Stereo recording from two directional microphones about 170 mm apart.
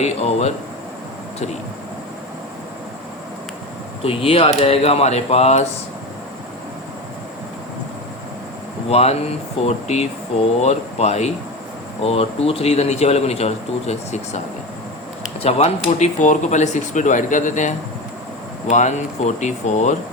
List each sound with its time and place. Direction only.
0.0 s a man's voice: 40° left (ahead or behind)
4.0 s a man's voice: 35° left (ahead or behind)
8.9 s a man's voice: 40° left (ahead or behind)